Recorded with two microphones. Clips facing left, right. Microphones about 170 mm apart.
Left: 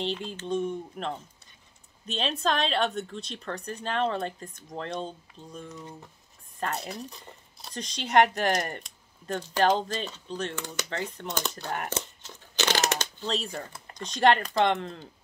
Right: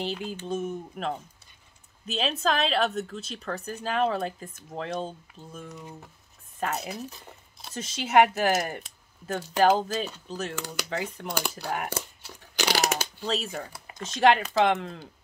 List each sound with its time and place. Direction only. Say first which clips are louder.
0.0 s a woman's voice: even; 5° right (ahead or behind)